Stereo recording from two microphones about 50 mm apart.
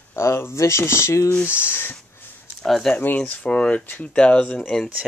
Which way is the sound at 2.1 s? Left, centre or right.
Left.